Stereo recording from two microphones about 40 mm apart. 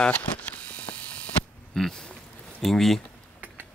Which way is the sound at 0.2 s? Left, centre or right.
Left.